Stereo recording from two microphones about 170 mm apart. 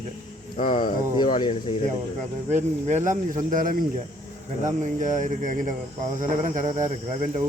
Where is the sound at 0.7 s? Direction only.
30° left (ahead or behind).